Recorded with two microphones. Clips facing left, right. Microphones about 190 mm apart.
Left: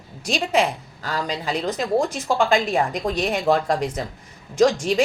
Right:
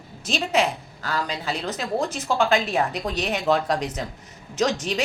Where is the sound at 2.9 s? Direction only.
10° left (ahead or behind).